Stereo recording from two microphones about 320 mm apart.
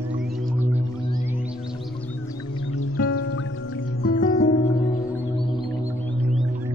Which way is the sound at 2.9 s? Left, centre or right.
Left.